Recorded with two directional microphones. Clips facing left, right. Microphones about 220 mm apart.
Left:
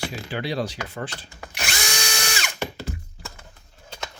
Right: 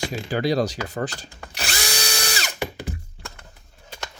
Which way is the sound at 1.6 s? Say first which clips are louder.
Right 1 dB; 35° right (ahead or behind).